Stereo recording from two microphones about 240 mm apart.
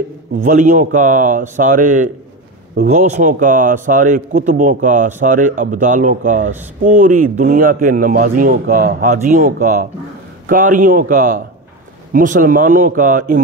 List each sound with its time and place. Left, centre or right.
0.4 s speech: right